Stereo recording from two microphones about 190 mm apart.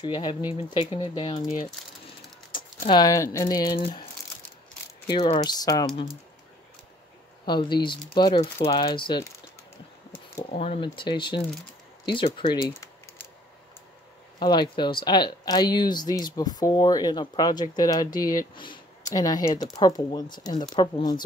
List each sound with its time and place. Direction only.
0.0 s speech: 25° left (ahead or behind)
3.8 s speech: 30° left (ahead or behind)
7.4 s speech: 25° left (ahead or behind)
10.5 s speech: 30° left (ahead or behind)
14.4 s speech: 25° left (ahead or behind)